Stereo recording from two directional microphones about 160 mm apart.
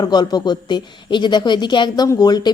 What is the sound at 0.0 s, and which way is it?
Speech, 25° left (ahead or behind).